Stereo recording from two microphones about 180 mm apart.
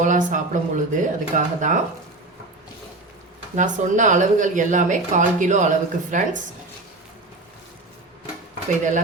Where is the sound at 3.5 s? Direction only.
45° right (ahead or behind).